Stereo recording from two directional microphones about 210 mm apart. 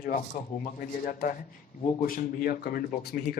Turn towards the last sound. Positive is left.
turn(degrees=45)  # may be behind; listen again after turning